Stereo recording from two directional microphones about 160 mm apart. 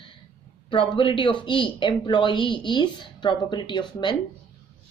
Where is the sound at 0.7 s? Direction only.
30° left (ahead or behind).